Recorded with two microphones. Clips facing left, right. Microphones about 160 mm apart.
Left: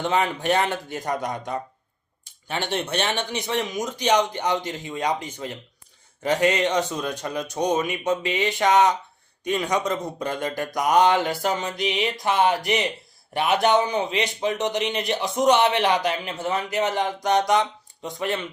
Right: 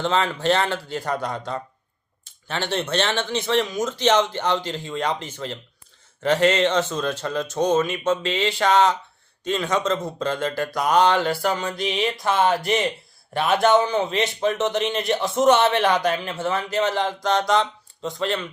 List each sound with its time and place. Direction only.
0.0 s speech: 15° left (ahead or behind)